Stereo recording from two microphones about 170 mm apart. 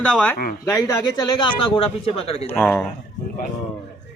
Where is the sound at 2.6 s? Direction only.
10° left (ahead or behind).